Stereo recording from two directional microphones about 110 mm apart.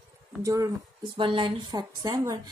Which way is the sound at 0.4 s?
30° right (ahead or behind).